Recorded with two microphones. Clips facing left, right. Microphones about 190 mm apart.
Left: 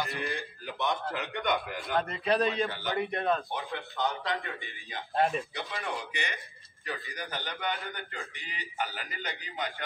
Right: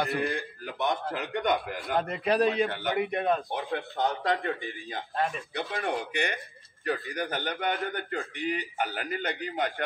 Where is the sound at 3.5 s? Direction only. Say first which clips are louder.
Right 4 dB; 55° right (ahead or behind).